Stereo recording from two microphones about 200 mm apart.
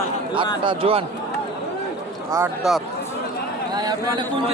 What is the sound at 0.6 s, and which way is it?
Speech, 25° right (ahead or behind).